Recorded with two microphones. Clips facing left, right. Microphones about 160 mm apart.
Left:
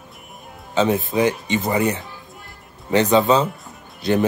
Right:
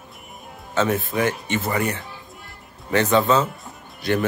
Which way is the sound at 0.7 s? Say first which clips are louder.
Left 3 dB; 15° left (ahead or behind).